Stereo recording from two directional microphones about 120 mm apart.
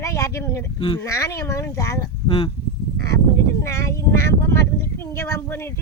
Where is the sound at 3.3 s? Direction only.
25° left (ahead or behind).